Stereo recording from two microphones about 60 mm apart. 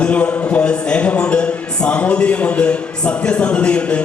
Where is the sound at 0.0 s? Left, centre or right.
Left.